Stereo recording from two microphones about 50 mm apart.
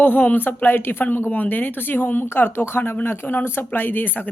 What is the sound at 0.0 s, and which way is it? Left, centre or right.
Speech, left.